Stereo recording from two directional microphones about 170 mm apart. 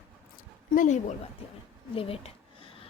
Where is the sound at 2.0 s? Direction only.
35° left (ahead or behind).